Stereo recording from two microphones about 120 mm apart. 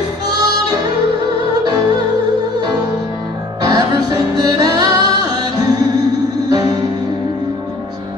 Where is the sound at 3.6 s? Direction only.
35° right (ahead or behind).